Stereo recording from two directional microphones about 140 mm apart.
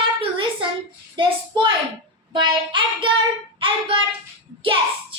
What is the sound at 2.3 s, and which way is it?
Child singing, 35° right (ahead or behind).